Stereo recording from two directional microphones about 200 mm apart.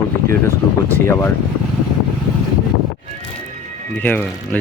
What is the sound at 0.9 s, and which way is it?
Speech, 10° left (ahead or behind).